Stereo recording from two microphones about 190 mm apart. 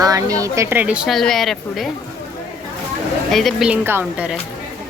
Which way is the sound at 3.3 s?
Centre (ahead or behind).